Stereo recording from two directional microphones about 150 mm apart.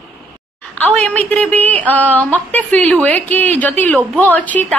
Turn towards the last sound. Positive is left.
turn(degrees=10)  # may be behind; listen again after turning